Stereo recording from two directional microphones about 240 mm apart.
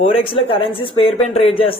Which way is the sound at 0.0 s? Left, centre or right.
Left.